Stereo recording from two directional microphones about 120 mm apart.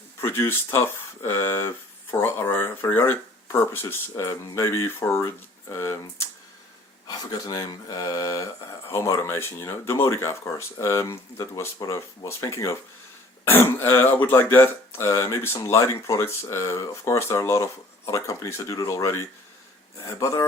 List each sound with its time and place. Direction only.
0.2 s speech: 20° left (ahead or behind)
7.1 s speech: 35° left (ahead or behind)